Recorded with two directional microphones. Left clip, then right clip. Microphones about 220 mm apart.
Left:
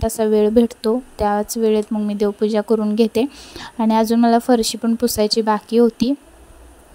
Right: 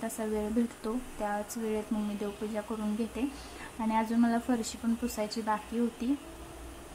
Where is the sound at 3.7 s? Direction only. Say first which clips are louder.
Left 14 dB; 45° left (ahead or behind).